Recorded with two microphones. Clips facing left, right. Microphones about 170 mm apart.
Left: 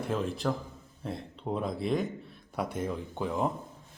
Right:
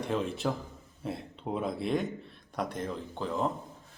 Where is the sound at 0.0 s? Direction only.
Centre (ahead or behind).